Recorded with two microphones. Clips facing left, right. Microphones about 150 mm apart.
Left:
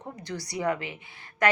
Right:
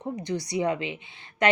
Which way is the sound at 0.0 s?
20° right (ahead or behind).